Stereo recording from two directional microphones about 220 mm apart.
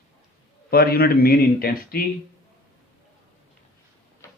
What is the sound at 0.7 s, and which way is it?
Speech, 45° left (ahead or behind).